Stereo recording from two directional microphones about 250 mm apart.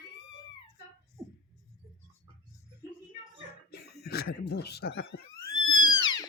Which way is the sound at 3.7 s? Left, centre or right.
Left.